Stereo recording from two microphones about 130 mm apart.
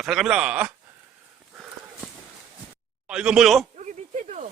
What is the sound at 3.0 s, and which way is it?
Speech, 5° right (ahead or behind).